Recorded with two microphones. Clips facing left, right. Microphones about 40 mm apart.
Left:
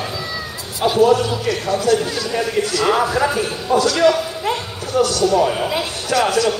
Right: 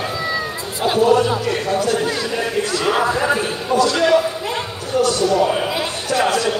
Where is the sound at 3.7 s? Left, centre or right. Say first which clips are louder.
Even; left.